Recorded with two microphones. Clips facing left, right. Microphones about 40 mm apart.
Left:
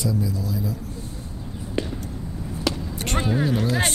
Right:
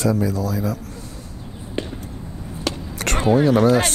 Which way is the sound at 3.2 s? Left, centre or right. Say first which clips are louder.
Right 8 dB; right.